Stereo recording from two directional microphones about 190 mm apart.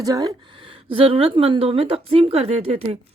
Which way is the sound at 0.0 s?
20° right (ahead or behind).